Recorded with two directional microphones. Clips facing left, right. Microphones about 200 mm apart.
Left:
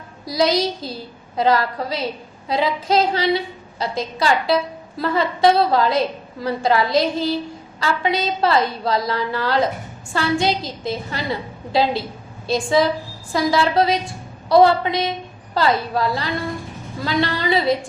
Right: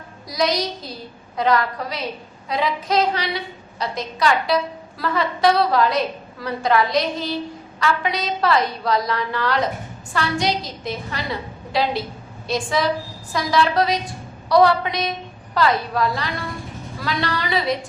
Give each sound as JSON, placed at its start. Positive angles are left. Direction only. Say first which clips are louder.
{"t": 0.3, "sound": "a woman's voice", "louder": "left 3 dB", "side_deg": 30}